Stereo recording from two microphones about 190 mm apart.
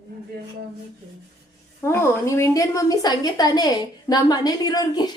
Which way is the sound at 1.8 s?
15° left (ahead or behind).